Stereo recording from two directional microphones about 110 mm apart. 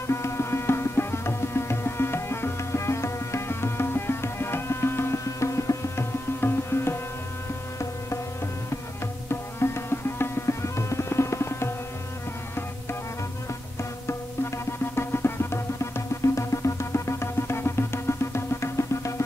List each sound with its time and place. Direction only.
0.0 s music: 25° left (ahead or behind)
9.3 s music: 20° left (ahead or behind)
15.0 s music: 20° left (ahead or behind)